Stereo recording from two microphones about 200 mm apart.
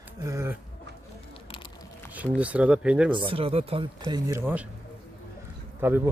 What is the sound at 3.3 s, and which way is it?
Speech, 30° right (ahead or behind).